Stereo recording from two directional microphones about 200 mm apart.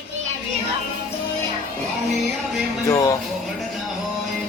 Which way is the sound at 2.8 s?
15° left (ahead or behind).